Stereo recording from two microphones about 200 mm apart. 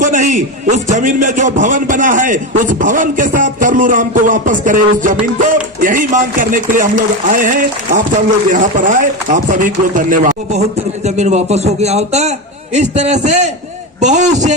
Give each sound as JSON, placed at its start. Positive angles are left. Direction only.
{"t": 0.0, "sound": "a man's voice", "side_deg": -40}